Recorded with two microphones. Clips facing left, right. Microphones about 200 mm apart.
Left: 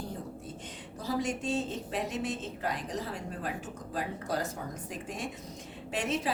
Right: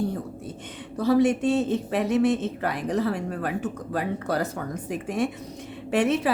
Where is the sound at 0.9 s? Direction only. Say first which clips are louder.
Right 12 dB; 65° right (ahead or behind).